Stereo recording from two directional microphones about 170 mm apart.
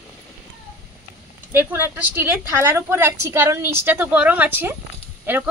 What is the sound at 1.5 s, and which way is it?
Speech, 10° right (ahead or behind).